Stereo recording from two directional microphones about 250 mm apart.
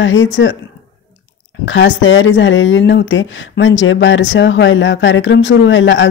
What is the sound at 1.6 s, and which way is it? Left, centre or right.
Speech, left.